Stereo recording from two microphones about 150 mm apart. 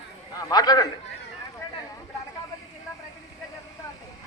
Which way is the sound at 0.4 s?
25° left (ahead or behind).